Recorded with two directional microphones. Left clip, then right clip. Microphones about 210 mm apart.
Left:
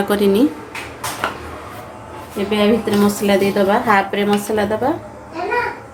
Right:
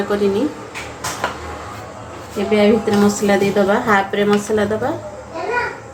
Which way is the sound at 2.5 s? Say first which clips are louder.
Right 2 dB; 25° left (ahead or behind).